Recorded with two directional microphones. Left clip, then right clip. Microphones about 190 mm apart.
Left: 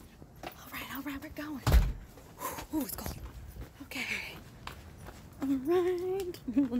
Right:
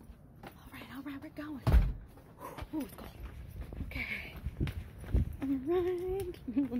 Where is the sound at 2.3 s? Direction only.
15° left (ahead or behind).